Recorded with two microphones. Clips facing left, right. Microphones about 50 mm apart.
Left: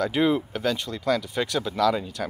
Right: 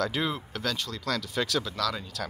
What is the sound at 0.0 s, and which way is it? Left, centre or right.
A man's voice, centre.